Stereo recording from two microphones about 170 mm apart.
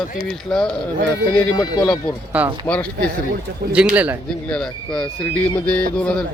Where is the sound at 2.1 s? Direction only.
5° left (ahead or behind).